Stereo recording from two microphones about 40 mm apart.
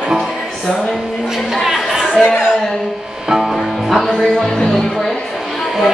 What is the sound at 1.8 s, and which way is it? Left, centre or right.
Chatter, centre.